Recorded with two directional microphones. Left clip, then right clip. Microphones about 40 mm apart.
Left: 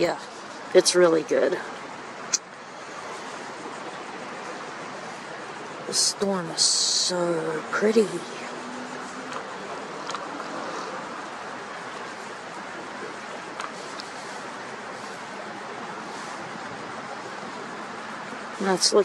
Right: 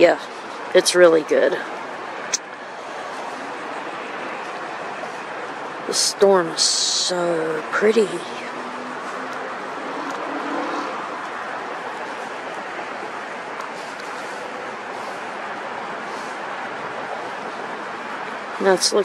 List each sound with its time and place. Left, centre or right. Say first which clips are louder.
0.7 s speech: right 5 dB; centre
5.9 s speech: right 9 dB; right
18.6 s speech: right 6 dB; centre